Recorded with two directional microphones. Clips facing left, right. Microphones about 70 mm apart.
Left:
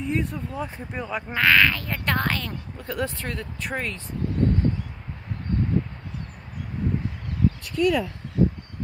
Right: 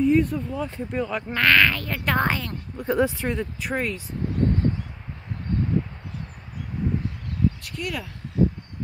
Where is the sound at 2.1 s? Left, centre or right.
Centre.